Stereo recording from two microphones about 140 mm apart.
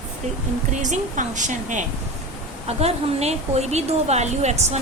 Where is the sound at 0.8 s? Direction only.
60° right (ahead or behind).